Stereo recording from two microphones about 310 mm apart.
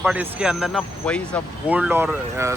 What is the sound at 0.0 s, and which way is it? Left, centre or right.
Speech, centre.